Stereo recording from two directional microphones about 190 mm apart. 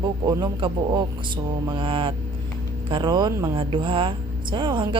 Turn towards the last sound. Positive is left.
turn(degrees=-25)  # may be behind; listen again after turning